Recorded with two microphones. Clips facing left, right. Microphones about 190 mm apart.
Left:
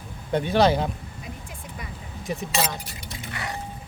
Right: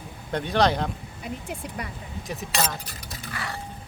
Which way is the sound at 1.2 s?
70° right (ahead or behind).